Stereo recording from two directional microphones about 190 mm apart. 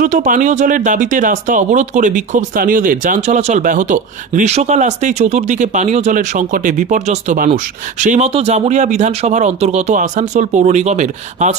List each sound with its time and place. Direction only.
0.0 s speech: 40° right (ahead or behind)